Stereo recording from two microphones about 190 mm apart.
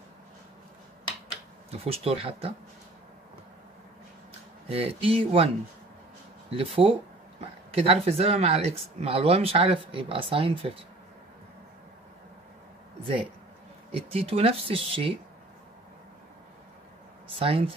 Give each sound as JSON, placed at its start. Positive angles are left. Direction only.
{"t": 1.7, "sound": "speech", "side_deg": -30}
{"t": 4.6, "sound": "speech", "side_deg": -30}
{"t": 6.5, "sound": "speech", "side_deg": -30}
{"t": 13.0, "sound": "speech", "side_deg": -30}
{"t": 17.3, "sound": "speech", "side_deg": -30}